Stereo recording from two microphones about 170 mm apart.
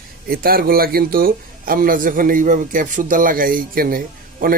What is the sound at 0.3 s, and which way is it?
Speech, 60° right (ahead or behind).